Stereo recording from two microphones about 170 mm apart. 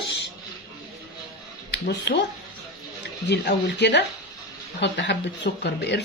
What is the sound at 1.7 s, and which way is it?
Speech, 90° left.